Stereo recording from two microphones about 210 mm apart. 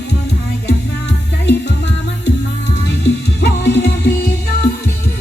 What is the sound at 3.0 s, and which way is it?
Music, 55° left (ahead or behind).